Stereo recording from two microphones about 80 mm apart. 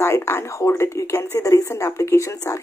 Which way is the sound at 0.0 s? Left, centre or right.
Left.